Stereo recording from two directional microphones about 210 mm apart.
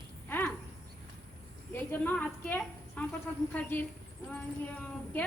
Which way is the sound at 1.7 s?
10° left (ahead or behind).